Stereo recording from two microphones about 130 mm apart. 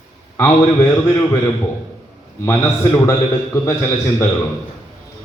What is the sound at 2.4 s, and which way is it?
A man's voice, 20° left (ahead or behind).